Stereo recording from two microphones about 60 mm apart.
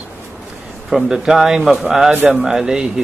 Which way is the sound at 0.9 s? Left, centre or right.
Centre.